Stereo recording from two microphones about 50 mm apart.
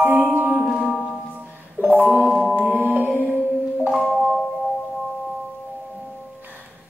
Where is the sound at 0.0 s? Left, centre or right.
Right.